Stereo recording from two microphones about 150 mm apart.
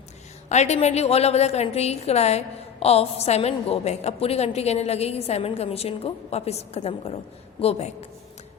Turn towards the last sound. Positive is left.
turn(degrees=45)  # may be behind; listen again after turning